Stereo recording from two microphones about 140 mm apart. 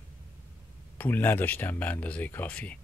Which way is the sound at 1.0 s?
15° left (ahead or behind).